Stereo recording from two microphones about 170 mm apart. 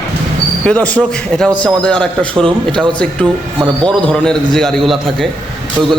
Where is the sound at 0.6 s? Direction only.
5° left (ahead or behind).